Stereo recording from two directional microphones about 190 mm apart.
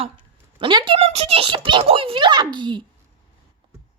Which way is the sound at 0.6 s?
25° right (ahead or behind).